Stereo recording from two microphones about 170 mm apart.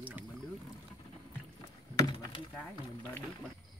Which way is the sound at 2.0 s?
25° left (ahead or behind).